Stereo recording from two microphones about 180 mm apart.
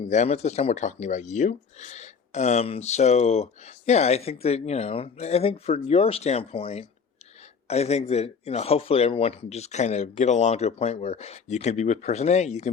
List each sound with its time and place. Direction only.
0.1 s speech: 40° left (ahead or behind)